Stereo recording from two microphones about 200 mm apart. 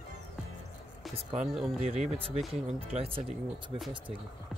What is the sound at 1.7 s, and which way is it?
Speech, 30° right (ahead or behind).